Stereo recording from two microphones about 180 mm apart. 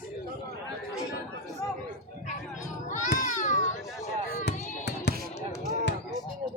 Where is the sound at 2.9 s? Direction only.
45° left (ahead or behind).